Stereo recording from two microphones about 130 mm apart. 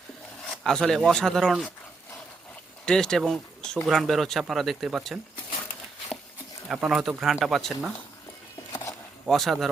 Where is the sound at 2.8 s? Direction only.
5° left (ahead or behind).